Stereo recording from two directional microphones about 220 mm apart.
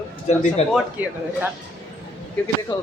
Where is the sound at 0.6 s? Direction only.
30° left (ahead or behind).